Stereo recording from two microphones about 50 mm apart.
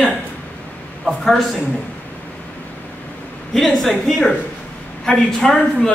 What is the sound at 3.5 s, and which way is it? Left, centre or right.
A woman's voice, centre.